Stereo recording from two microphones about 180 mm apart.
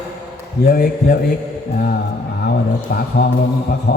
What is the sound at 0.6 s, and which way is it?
Speech, 60° left (ahead or behind).